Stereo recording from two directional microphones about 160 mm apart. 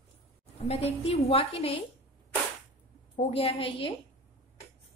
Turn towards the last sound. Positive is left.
turn(degrees=35)  # may be behind; listen again after turning